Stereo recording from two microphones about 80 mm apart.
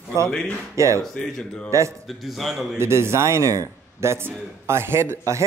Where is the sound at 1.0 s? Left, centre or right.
Centre.